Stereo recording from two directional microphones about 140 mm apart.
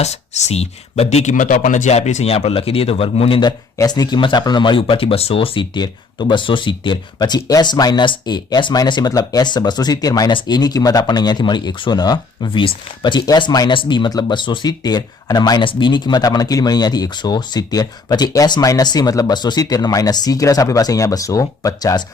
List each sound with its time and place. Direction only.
0.0 s speech: 50° left (ahead or behind)
3.8 s speech: 30° left (ahead or behind)